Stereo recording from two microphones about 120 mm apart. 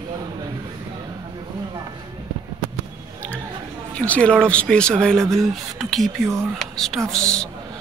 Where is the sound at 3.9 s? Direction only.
10° left (ahead or behind).